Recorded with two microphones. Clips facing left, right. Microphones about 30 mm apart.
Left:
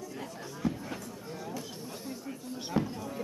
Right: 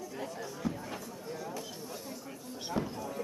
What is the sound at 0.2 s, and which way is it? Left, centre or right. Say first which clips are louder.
Chatter: left 2 dB; centre.